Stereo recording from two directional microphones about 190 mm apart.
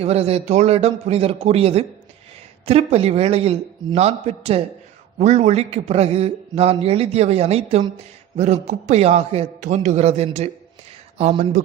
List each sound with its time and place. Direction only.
0.0 s a man's voice: 30° right (ahead or behind)